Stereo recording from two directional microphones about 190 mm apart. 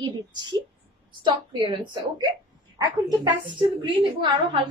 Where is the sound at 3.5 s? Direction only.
25° right (ahead or behind).